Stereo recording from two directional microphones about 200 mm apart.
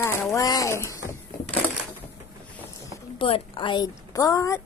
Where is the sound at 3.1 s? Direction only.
25° left (ahead or behind).